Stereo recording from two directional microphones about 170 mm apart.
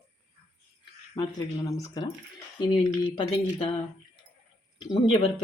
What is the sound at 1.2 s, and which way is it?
Speech, 35° left (ahead or behind).